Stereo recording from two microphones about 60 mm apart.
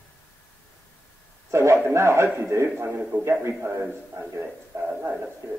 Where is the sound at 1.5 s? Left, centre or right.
Right.